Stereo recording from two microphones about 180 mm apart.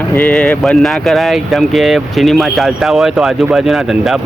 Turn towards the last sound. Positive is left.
turn(degrees=0)  # may be behind; listen again after turning